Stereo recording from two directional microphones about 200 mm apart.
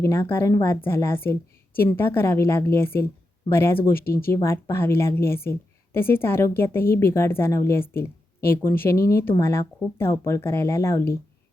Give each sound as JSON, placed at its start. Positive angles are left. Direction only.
{"t": 0.0, "sound": "a woman's voice", "side_deg": 15}
{"t": 3.9, "sound": "speech", "side_deg": 50}
{"t": 4.3, "sound": "a woman's voice", "side_deg": 15}